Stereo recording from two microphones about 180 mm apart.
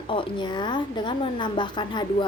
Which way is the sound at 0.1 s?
25° left (ahead or behind).